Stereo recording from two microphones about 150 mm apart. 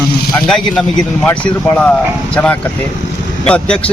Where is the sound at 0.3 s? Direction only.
5° left (ahead or behind).